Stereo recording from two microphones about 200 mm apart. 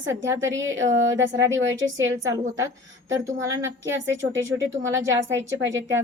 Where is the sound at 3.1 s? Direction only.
20° right (ahead or behind).